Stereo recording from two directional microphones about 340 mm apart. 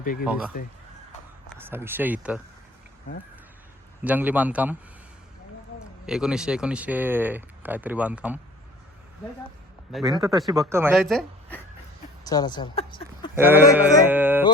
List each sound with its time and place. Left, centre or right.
0.0 s speech: left
0.3 s speech: centre
1.5 s speech: centre
4.0 s speech: centre
6.1 s speech: centre
9.9 s speech: centre
13.3 s speech: centre
13.7 s music: centre